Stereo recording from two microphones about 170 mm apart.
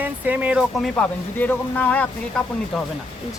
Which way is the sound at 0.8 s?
10° left (ahead or behind).